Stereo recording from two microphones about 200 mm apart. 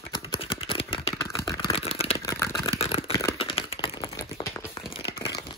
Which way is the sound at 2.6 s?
30° left (ahead or behind).